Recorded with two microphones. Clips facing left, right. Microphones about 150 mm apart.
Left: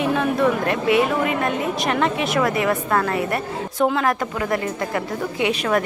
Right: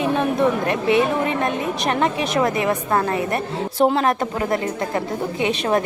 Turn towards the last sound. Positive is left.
turn(degrees=-25)  # may be behind; listen again after turning